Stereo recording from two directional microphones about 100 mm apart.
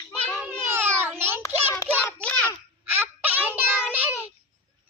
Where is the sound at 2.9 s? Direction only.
20° right (ahead or behind).